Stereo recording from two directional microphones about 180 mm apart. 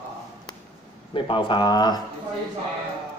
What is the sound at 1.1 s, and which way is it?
Speech, 30° left (ahead or behind).